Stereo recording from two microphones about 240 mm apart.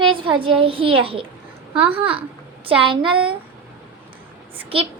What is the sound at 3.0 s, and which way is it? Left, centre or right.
Speech, centre.